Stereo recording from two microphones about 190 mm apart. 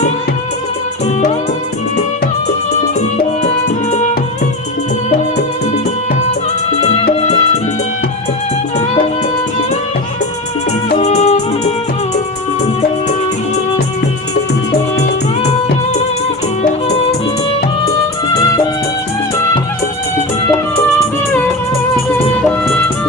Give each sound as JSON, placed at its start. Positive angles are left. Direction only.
{"t": 6.8, "sound": "music", "side_deg": 30}
{"t": 10.9, "sound": "music", "side_deg": 35}